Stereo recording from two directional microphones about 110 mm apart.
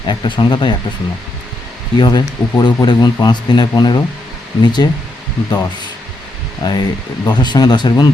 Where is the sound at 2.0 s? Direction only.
40° left (ahead or behind).